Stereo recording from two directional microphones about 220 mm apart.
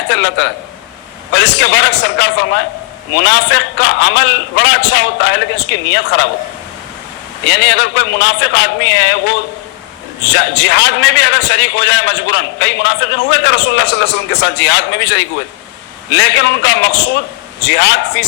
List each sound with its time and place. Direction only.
0.1 s a man's voice: 55° left (ahead or behind)
7.4 s a man's voice: 50° left (ahead or behind)
10.3 s a man's voice: 50° left (ahead or behind)